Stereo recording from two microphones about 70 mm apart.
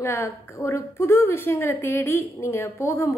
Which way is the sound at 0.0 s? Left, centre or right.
Left.